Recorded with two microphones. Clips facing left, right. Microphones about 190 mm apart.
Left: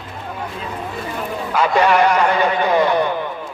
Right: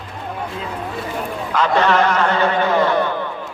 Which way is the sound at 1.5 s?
10° left (ahead or behind).